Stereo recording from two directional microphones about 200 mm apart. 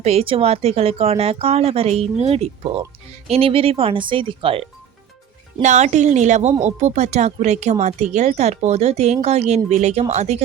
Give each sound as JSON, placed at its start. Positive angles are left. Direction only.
{"t": 0.0, "sound": "speech", "side_deg": -30}
{"t": 5.6, "sound": "speech", "side_deg": -35}